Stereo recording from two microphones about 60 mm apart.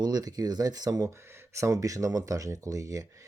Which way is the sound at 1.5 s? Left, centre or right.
Right.